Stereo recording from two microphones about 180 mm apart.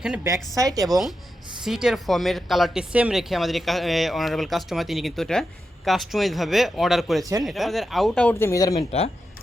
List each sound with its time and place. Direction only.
0.5 s a woman's voice: 20° right (ahead or behind)
1.6 s speech: 5° right (ahead or behind); by 8.9 s 20° left (ahead or behind)